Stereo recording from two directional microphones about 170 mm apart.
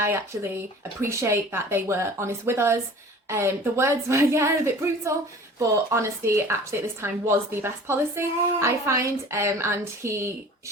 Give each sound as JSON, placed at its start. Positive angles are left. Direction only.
{"t": 0.0, "sound": "a woman's voice", "side_deg": -15}